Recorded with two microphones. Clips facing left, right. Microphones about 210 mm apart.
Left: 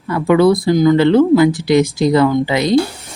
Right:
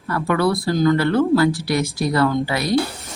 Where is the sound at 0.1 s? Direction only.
20° left (ahead or behind).